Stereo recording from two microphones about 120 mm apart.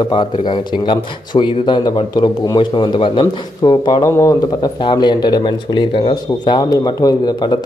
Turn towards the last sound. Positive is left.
turn(degrees=35)  # may be behind; listen again after turning